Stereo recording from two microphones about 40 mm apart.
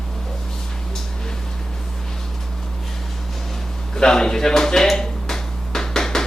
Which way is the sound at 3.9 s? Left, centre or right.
Centre.